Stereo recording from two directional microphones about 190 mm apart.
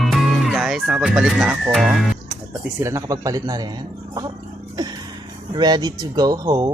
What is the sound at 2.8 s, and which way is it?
Speech, 15° right (ahead or behind).